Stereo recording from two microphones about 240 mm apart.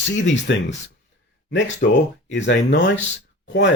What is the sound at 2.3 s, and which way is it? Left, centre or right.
Speech, left.